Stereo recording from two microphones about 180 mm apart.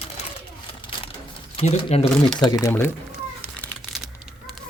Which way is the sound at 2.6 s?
10° left (ahead or behind).